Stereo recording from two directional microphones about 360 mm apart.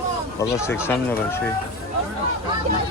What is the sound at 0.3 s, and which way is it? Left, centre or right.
Speech, centre.